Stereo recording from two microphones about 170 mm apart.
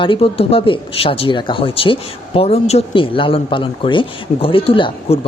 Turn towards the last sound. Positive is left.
turn(degrees=30)  # may be behind; listen again after turning